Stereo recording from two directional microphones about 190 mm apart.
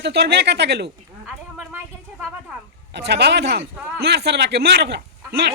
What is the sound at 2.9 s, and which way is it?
Speech, 60° right (ahead or behind).